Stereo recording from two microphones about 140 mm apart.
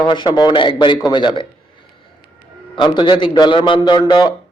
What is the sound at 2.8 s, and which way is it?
A man's voice, 30° left (ahead or behind).